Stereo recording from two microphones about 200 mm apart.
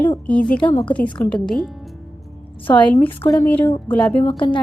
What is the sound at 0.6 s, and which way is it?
Speech, 25° left (ahead or behind).